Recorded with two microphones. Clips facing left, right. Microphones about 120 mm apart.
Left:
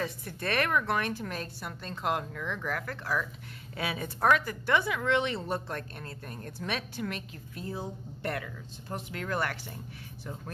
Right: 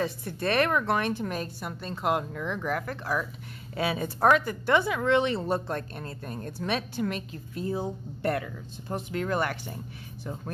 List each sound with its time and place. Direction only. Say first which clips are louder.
0.0 s speech: right 5 dB; 30° right (ahead or behind)